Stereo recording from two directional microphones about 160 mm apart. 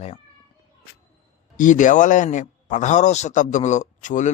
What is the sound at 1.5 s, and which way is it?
Speech, 55° left (ahead or behind).